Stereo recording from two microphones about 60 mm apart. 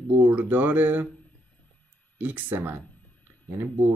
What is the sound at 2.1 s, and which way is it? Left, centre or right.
Speech, right.